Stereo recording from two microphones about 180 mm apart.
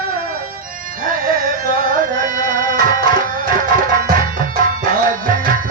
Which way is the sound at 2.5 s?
50° right (ahead or behind).